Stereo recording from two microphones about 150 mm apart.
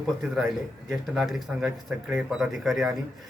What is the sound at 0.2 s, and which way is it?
A man's voice, centre (ahead or behind).